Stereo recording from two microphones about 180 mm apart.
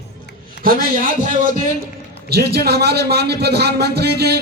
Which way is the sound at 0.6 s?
50° right (ahead or behind).